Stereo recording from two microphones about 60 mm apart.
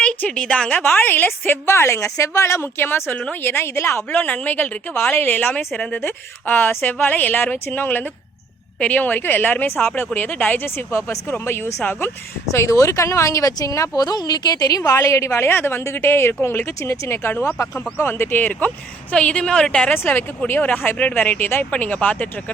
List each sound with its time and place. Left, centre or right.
0.3 s a woman's voice: centre
0.8 s speech: left
1.6 s speech: left
4.4 s speech: left
5.7 s a woman's voice: centre
6.0 s speech: left
12.5 s speech: left
14.9 s speech: left
19.2 s a woman's voice: centre
19.9 s speech: left